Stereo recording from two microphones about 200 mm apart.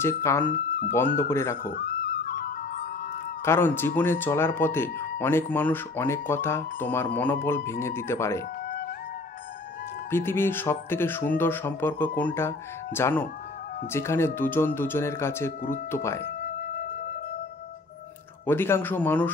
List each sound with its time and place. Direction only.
0.0 s speech: 15° left (ahead or behind)
1.6 s music: 45° left (ahead or behind)
3.4 s speech: 10° left (ahead or behind)
8.6 s music: 45° left (ahead or behind)
10.1 s speech: 10° left (ahead or behind)
18.4 s speech: 10° left (ahead or behind)